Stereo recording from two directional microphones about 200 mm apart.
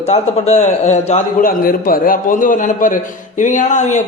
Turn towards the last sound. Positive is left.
turn(degrees=35)  # may be behind; listen again after turning